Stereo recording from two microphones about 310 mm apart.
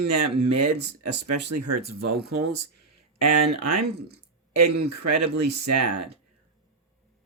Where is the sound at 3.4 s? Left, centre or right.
Right.